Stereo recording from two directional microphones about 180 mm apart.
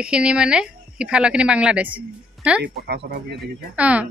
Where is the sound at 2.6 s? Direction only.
65° right (ahead or behind).